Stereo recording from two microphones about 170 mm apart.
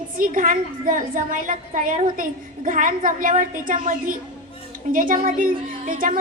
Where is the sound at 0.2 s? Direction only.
55° right (ahead or behind).